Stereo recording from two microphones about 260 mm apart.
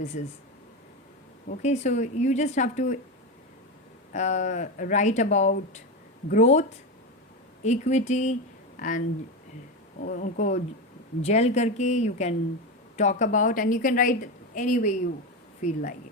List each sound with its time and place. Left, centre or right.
0.1 s a woman's voice: left
1.5 s a woman's voice: left
4.1 s a woman's voice: left